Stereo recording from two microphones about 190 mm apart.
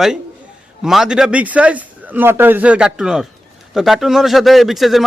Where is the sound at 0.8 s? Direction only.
Centre (ahead or behind).